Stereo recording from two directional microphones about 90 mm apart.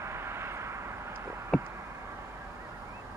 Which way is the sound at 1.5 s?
5° left (ahead or behind).